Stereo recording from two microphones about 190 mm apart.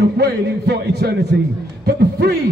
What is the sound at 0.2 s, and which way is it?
A man's voice, 60° right (ahead or behind).